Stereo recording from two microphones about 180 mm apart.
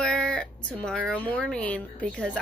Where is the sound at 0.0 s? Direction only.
5° left (ahead or behind).